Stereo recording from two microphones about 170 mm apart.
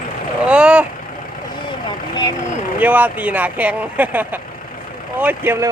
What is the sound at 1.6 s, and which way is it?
Vehicle, 25° left (ahead or behind).